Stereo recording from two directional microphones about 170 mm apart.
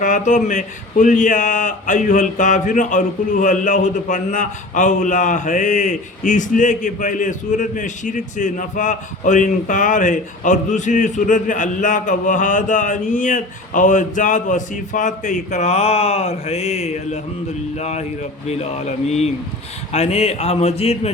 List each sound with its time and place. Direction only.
0.0 s speech: 50° left (ahead or behind)